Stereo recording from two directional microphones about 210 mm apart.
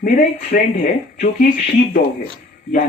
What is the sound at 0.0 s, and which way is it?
Speech, 40° left (ahead or behind).